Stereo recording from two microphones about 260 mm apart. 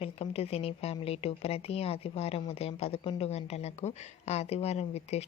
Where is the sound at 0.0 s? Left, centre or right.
Left.